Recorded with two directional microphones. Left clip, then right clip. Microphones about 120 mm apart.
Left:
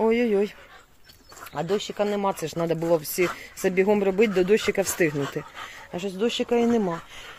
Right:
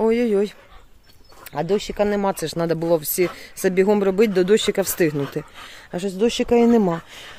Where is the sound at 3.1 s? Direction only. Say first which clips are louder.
Right 3 dB; 40° right (ahead or behind).